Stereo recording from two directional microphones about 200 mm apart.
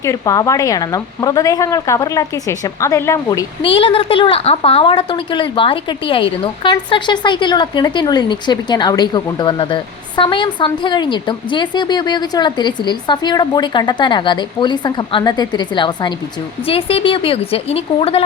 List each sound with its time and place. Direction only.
0.0 s a woman's voice: 15° left (ahead or behind)